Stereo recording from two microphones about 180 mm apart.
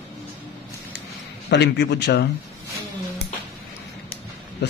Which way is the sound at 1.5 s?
70° left (ahead or behind).